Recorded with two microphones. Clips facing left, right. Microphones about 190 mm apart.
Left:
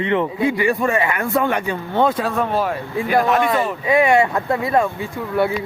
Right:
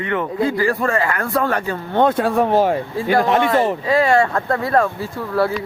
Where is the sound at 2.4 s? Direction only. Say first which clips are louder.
Right 5 dB; 20° right (ahead or behind).